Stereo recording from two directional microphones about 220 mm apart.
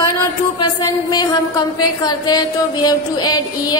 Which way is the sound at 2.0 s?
20° left (ahead or behind).